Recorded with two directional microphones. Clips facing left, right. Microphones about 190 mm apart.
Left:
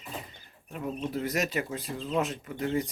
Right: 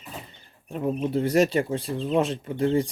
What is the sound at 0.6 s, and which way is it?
Speech, 30° right (ahead or behind).